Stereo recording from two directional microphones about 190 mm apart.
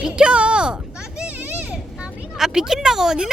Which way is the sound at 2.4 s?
5° right (ahead or behind).